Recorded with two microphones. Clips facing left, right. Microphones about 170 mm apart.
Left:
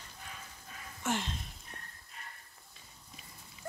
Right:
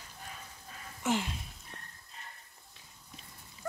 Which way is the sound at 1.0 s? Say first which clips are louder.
Right 3 dB; 10° right (ahead or behind).